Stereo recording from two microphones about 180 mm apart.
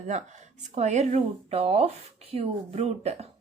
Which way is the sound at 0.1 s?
40° right (ahead or behind).